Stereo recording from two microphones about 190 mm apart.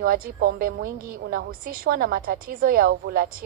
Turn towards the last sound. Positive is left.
turn(degrees=-50)  # may be behind; listen again after turning